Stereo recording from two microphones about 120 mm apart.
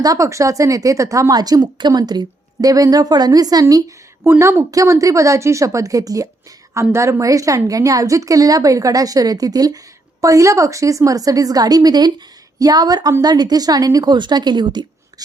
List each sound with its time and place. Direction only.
0.0 s a woman's voice: 30° right (ahead or behind)